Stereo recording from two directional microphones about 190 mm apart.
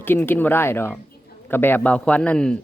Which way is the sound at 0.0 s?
10° left (ahead or behind).